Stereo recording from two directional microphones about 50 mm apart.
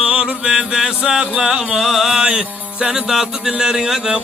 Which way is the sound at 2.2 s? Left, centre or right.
Centre.